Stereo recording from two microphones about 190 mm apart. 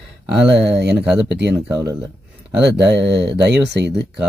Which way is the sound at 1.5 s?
15° right (ahead or behind).